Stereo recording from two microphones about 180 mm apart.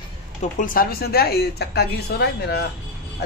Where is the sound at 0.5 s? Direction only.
50° left (ahead or behind).